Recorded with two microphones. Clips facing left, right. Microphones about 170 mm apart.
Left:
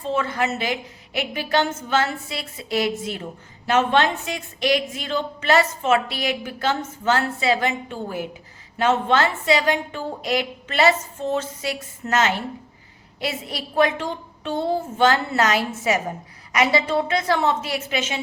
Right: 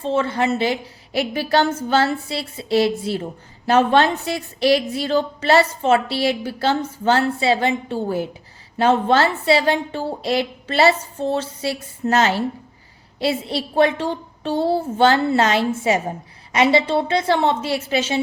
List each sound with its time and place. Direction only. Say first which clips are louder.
0.0 s a woman's voice: right 4 dB; 30° right (ahead or behind)